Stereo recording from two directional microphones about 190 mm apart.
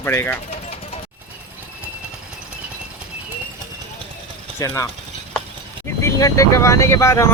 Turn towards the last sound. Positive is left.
turn(degrees=15)  # may be behind; listen again after turning